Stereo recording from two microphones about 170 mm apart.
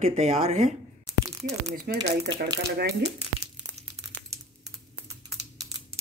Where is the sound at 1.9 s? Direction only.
75° right (ahead or behind).